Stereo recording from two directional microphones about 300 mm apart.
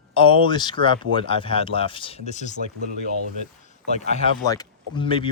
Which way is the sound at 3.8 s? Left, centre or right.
Left.